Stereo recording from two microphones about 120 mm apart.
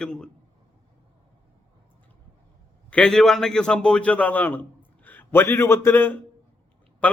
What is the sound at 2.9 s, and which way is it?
A man's voice, 5° left (ahead or behind).